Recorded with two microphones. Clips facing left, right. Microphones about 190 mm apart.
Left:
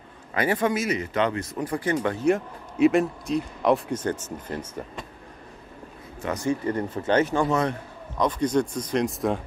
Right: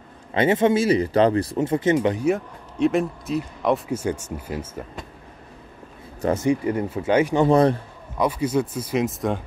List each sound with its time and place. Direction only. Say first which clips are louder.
0.3 s speech: right 5 dB; 25° right (ahead or behind)
2.2 s speech: even; centre (ahead or behind)
6.3 s speech: right 3 dB; 15° right (ahead or behind)
7.4 s a man's voice: right 7 dB; 35° right (ahead or behind)
8.2 s speech: right 1 dB; 10° right (ahead or behind)